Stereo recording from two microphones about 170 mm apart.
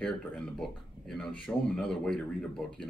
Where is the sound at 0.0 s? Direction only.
5° left (ahead or behind).